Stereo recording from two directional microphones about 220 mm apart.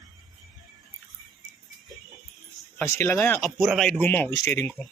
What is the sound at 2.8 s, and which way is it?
Speech, 10° left (ahead or behind).